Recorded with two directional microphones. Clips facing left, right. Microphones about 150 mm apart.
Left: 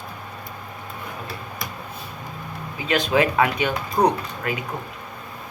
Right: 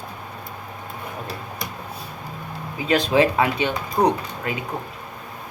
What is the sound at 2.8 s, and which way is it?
Speech, 30° right (ahead or behind).